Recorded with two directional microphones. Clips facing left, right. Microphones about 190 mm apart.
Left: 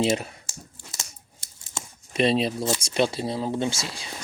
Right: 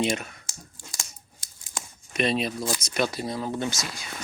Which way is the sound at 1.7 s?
30° left (ahead or behind).